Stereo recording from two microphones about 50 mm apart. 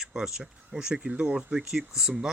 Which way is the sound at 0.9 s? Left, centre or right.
Right.